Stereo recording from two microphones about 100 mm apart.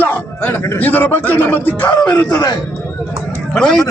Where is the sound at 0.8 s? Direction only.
20° left (ahead or behind).